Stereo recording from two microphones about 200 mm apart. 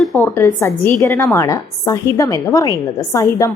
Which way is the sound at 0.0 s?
10° left (ahead or behind).